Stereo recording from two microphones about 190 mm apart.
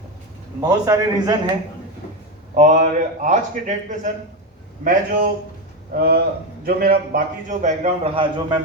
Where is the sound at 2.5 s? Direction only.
40° right (ahead or behind).